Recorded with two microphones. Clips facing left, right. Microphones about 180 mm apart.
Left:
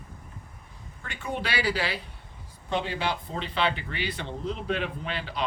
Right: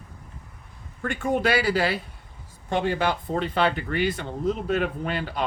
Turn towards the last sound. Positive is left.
turn(degrees=-45)  # may be behind; listen again after turning